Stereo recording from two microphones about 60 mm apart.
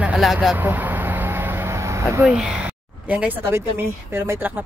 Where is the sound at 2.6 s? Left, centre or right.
Right.